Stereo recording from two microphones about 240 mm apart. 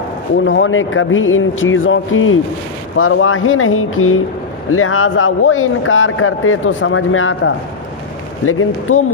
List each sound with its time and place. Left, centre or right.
0.4 s speech: left